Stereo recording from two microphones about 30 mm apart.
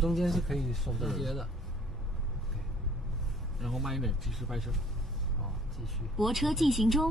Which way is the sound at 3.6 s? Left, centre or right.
Centre.